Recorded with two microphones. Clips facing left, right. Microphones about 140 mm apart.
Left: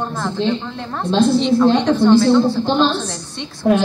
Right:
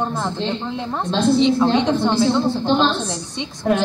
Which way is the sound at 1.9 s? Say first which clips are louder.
Left 5 dB; 20° right (ahead or behind).